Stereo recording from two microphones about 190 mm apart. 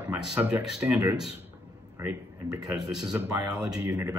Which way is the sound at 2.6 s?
Centre (ahead or behind).